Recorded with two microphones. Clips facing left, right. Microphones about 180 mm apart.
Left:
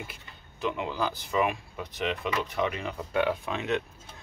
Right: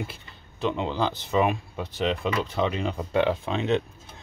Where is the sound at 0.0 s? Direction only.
30° right (ahead or behind).